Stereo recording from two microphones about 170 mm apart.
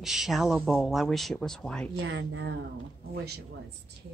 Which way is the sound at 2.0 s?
90° right.